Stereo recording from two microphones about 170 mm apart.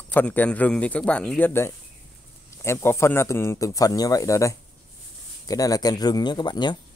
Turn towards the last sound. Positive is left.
turn(degrees=25)  # may be behind; listen again after turning